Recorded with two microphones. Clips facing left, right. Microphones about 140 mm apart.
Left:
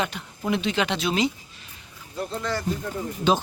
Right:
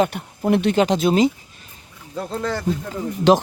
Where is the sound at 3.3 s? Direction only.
85° right.